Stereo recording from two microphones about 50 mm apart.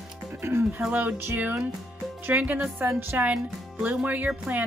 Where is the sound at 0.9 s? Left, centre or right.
Right.